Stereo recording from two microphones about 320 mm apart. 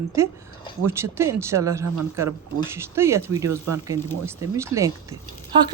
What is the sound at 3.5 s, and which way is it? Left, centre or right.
Speech, right.